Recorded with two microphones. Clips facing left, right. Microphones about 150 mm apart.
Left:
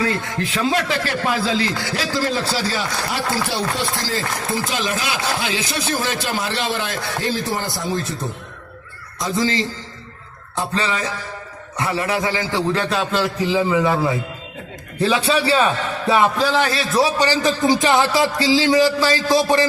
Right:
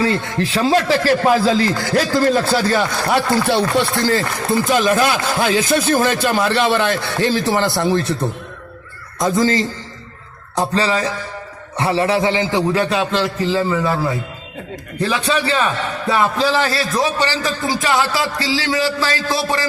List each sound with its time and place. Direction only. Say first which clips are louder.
0.0 s a man's voice: right 4 dB; 30° right (ahead or behind); by 8.2 s 65° right (ahead or behind)
9.1 s a man's voice: right 5 dB; 50° right (ahead or behind)
10.5 s music: right 5 dB; 35° right (ahead or behind)
11.8 s a man's voice: right 5 dB; 30° right (ahead or behind)
12.8 s a man's voice: right 2 dB; centre (ahead or behind); by 14.0 s 15° left (ahead or behind)
15.0 s a man's voice: left 1 dB; 30° left (ahead or behind)